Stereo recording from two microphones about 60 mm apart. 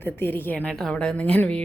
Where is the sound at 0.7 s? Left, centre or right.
Centre.